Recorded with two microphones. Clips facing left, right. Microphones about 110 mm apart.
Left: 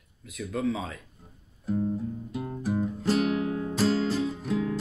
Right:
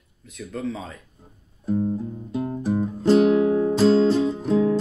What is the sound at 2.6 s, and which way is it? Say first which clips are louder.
Music: right 5 dB; 25° right (ahead or behind).